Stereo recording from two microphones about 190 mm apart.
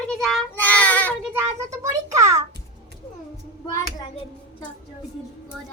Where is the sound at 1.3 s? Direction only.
15° right (ahead or behind).